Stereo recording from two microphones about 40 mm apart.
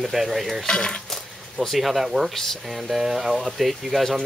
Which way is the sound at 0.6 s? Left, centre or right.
Left.